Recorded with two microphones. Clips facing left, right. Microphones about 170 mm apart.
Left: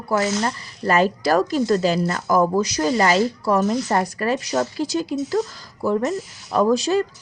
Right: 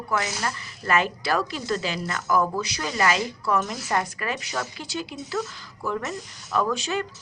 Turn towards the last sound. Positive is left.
turn(degrees=35)  # may be behind; listen again after turning